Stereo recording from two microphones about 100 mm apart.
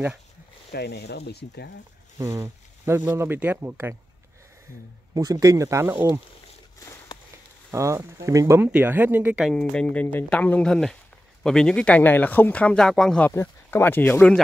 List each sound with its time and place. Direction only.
2.1 s speech: 30° right (ahead or behind)
5.1 s a man's voice: 40° right (ahead or behind)
7.7 s speech: 30° right (ahead or behind)
9.4 s speech: 5° left (ahead or behind)
13.3 s speech: 25° left (ahead or behind)